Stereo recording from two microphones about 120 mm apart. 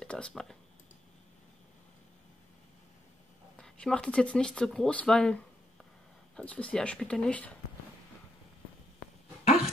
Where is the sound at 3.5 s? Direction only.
5° left (ahead or behind).